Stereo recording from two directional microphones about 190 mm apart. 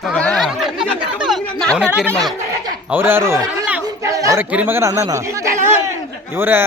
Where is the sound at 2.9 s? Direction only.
10° right (ahead or behind).